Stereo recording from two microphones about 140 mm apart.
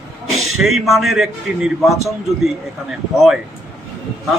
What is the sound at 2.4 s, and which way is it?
Speech, 5° right (ahead or behind).